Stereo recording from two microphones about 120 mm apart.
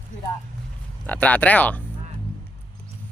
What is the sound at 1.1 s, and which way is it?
Speech, 15° left (ahead or behind).